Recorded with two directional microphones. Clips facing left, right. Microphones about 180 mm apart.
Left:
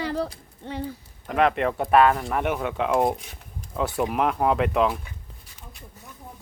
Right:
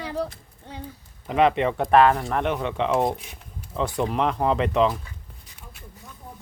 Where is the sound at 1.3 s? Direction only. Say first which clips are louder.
Right 2 dB; centre (ahead or behind).